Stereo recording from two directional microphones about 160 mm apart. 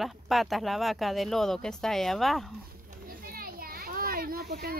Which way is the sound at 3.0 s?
65° right (ahead or behind).